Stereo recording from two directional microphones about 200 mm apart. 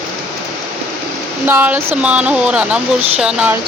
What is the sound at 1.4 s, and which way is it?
Speech, 10° right (ahead or behind).